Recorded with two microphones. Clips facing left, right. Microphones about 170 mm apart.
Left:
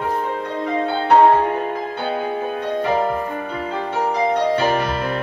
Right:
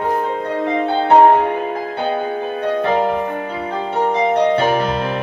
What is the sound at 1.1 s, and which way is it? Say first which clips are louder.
Music: right 2 dB; 60° right (ahead or behind).